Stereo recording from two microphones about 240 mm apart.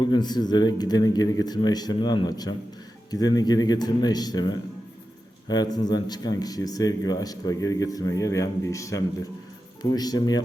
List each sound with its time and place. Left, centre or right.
0.0 s speech: centre